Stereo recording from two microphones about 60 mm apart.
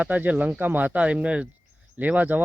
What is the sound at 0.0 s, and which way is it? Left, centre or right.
Speech, right.